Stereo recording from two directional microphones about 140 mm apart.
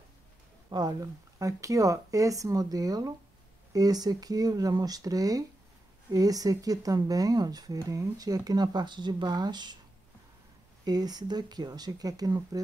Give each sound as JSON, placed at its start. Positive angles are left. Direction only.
{"t": 0.7, "sound": "speech", "side_deg": -30}
{"t": 10.9, "sound": "speech", "side_deg": -30}